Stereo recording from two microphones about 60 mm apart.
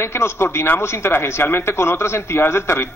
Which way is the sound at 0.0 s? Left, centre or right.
Left.